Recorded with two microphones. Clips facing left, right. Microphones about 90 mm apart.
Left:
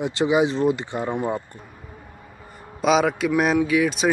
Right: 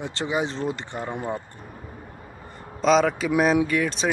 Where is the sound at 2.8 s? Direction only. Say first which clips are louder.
Even; 5° left (ahead or behind).